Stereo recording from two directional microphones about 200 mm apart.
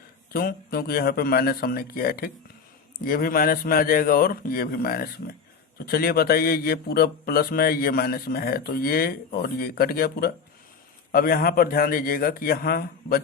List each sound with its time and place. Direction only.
0.3 s speech: 50° left (ahead or behind)